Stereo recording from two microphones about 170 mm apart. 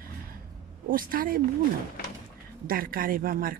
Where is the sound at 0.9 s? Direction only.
55° right (ahead or behind).